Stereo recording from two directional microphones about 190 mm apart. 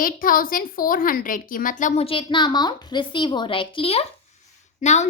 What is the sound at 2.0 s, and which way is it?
A woman's voice, 25° left (ahead or behind).